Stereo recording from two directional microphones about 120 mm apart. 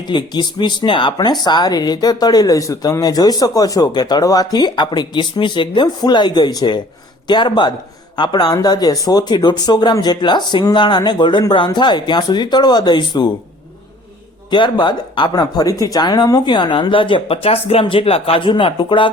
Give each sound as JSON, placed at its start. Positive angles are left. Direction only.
{"t": 0.1, "sound": "speech", "side_deg": 40}
{"t": 14.5, "sound": "speech", "side_deg": 40}